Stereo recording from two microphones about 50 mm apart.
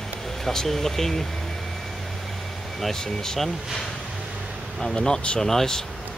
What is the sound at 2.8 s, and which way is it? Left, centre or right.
Speech, centre.